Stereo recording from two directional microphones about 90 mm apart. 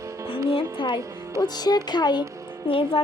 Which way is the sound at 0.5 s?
70° left (ahead or behind).